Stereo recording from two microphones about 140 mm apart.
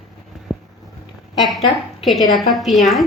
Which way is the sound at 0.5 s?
5° left (ahead or behind).